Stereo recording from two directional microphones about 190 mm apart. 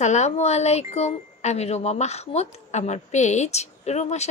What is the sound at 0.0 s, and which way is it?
Speech, 35° left (ahead or behind).